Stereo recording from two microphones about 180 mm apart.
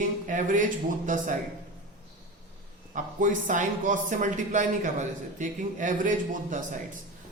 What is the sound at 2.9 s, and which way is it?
Speech, 45° right (ahead or behind).